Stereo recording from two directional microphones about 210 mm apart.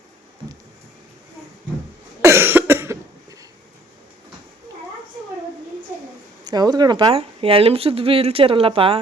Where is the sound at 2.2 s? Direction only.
10° right (ahead or behind).